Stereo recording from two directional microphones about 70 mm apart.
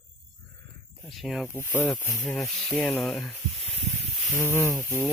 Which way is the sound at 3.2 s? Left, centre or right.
Centre.